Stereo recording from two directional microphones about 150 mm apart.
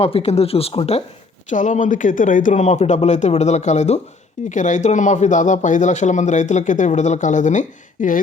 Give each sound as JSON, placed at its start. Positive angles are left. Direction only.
{"t": 0.0, "sound": "speech", "side_deg": 45}
{"t": 1.5, "sound": "a man's voice", "side_deg": 55}